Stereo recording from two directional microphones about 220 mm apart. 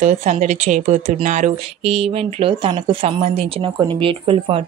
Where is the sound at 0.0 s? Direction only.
35° right (ahead or behind).